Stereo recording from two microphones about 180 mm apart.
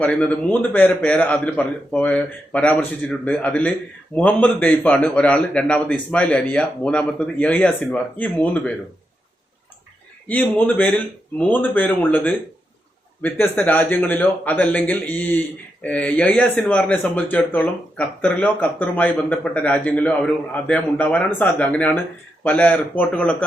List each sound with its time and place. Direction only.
0.0 s a man's voice: 5° left (ahead or behind)
10.2 s a man's voice: 10° left (ahead or behind)